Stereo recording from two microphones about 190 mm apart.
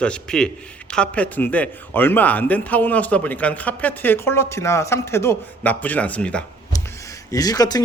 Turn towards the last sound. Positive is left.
turn(degrees=20)  # may be behind; listen again after turning